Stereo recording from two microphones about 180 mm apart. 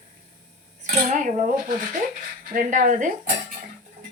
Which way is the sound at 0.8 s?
45° right (ahead or behind).